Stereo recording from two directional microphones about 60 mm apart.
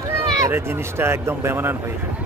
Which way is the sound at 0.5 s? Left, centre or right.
Right.